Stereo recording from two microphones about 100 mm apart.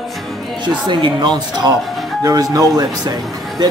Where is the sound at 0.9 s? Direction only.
50° right (ahead or behind).